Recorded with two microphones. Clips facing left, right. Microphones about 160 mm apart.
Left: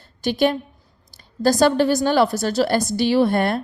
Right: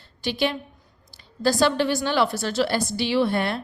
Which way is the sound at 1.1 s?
45° left (ahead or behind).